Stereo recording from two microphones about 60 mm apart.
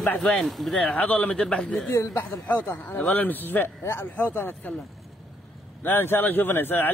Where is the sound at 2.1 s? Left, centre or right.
Left.